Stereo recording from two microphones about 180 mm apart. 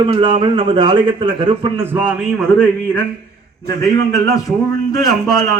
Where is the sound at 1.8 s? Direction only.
10° right (ahead or behind).